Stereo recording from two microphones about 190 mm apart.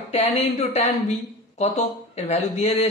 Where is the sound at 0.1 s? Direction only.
35° left (ahead or behind).